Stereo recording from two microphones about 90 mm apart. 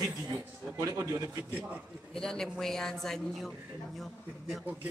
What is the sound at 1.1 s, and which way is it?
Speech, 25° right (ahead or behind).